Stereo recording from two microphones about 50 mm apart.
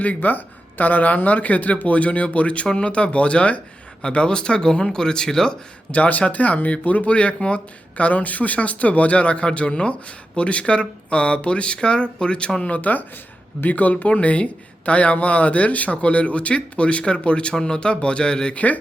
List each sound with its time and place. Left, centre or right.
0.0 s speech: left; by 5.5 s centre
5.9 s speech: left